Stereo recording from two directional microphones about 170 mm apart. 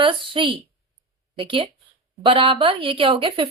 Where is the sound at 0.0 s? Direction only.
30° right (ahead or behind).